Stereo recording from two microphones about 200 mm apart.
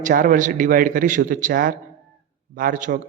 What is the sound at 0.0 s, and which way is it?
A man's voice, 45° right (ahead or behind).